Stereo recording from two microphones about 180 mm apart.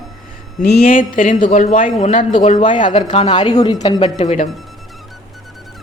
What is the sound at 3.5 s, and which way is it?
Speech, 20° left (ahead or behind).